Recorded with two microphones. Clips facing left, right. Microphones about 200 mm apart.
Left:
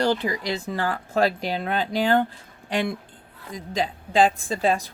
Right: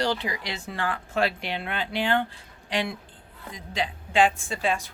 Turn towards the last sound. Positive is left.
turn(degrees=40)  # may be behind; listen again after turning